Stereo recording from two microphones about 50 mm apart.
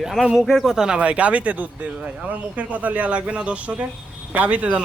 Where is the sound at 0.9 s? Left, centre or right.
Right.